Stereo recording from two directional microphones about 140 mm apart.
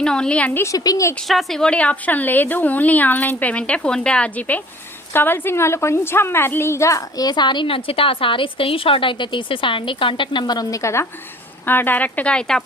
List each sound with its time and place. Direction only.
0.0 s a woman's voice: 5° left (ahead or behind); by 1.1 s 25° left (ahead or behind)
1.3 s a woman's voice: centre (ahead or behind)